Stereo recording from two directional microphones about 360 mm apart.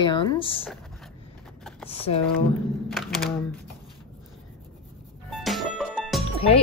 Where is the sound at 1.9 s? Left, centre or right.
Centre.